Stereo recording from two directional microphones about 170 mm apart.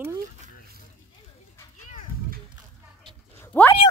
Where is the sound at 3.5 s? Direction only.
15° left (ahead or behind).